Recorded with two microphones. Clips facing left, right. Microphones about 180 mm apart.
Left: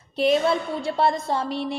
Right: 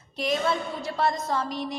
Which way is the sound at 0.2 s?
30° left (ahead or behind).